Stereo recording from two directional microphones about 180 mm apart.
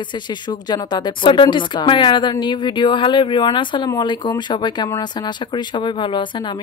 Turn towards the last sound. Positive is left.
turn(degrees=25)  # may be behind; listen again after turning